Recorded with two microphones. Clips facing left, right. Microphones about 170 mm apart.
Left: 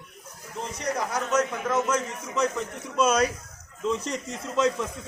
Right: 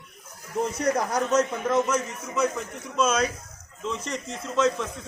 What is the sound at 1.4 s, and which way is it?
A man's voice, 10° right (ahead or behind).